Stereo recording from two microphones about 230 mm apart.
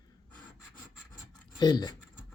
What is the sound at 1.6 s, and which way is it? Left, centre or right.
Speech, centre.